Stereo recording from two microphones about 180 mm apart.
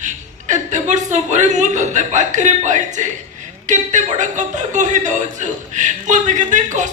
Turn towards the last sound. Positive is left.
turn(degrees=-45)  # may be behind; listen again after turning